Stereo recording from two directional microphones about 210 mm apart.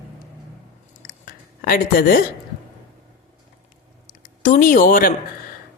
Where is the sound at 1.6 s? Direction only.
45° left (ahead or behind).